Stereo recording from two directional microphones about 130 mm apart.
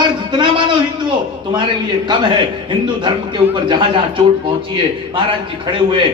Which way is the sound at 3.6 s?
40° right (ahead or behind).